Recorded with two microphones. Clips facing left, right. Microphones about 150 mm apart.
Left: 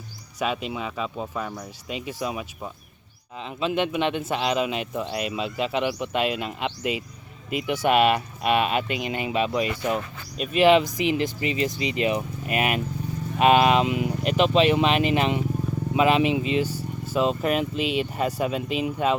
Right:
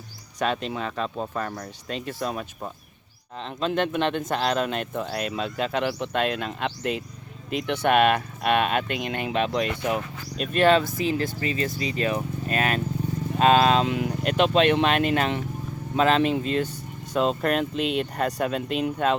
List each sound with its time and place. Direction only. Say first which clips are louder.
0.3 s speech: right 1 dB; 5° left (ahead or behind)